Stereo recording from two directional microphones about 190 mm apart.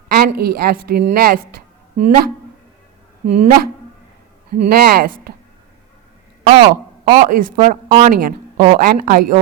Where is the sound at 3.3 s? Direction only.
35° right (ahead or behind).